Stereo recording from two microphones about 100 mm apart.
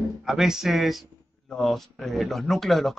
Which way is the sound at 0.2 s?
5° right (ahead or behind).